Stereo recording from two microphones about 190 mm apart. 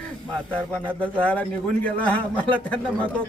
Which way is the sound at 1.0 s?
10° left (ahead or behind).